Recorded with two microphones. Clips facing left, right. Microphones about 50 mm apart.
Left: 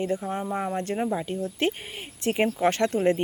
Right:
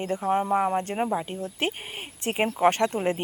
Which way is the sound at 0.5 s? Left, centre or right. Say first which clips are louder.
Right 3 dB; centre.